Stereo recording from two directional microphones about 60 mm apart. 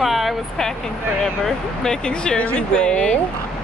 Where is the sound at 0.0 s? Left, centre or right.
Centre.